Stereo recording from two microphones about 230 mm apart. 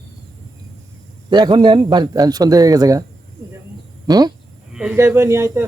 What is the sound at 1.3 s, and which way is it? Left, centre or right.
A man's voice, centre.